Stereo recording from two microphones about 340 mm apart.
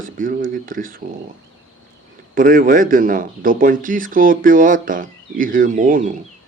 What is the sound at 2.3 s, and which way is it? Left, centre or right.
Speech, right.